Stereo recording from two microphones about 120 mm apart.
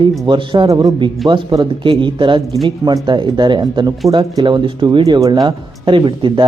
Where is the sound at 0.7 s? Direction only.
30° right (ahead or behind).